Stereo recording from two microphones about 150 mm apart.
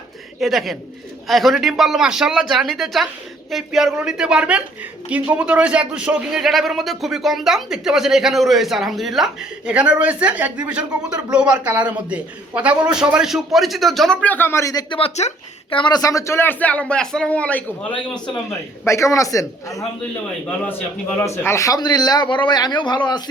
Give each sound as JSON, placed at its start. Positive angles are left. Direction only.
{"t": 0.3, "sound": "a man's voice", "side_deg": 0}
{"t": 15.7, "sound": "speech", "side_deg": 30}
{"t": 18.9, "sound": "speech", "side_deg": 20}
{"t": 21.2, "sound": "speech", "side_deg": 20}